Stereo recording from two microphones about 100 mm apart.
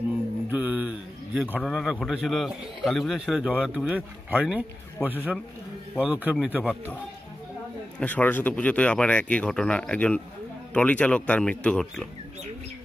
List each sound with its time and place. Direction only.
0.5 s a sound: 15° right (ahead or behind)
1.6 s a man's voice: centre (ahead or behind)
8.0 s speech: 15° left (ahead or behind)